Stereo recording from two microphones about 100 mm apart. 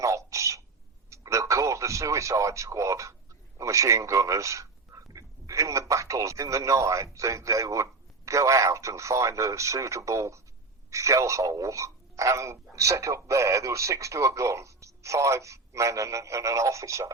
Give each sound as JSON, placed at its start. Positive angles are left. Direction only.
{"t": 0.0, "sound": "a sound", "side_deg": -30}
{"t": 1.1, "sound": "radio", "side_deg": -30}
{"t": 3.6, "sound": "speech", "side_deg": -30}